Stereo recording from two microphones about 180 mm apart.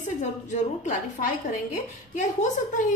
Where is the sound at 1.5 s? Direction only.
45° left (ahead or behind).